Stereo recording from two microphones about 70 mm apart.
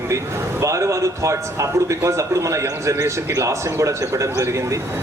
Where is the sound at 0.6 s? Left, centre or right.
Right.